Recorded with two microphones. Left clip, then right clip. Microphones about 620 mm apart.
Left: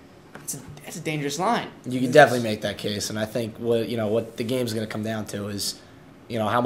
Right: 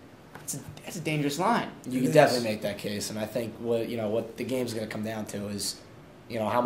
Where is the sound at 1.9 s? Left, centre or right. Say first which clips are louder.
Left 5 dB; left.